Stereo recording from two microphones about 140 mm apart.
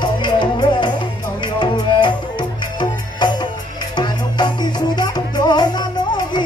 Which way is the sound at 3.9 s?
30° left (ahead or behind).